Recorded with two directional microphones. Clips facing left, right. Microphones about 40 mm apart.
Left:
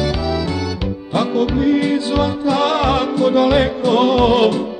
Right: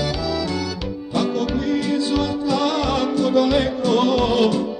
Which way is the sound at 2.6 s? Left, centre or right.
Left.